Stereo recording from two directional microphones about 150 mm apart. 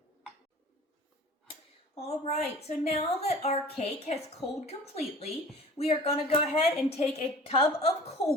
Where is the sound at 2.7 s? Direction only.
45° left (ahead or behind).